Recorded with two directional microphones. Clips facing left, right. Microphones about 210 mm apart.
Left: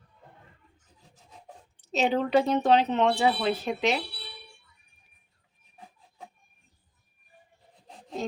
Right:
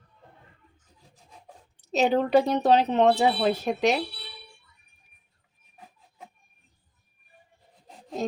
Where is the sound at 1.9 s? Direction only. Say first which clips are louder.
Right 3 dB; 40° right (ahead or behind).